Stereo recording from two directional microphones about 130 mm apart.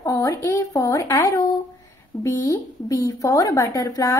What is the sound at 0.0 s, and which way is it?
A woman's voice, 25° left (ahead or behind).